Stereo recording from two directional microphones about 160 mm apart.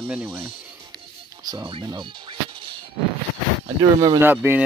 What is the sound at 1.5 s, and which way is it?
Speech, 30° right (ahead or behind).